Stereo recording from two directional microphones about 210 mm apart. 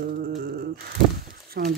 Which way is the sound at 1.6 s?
40° right (ahead or behind).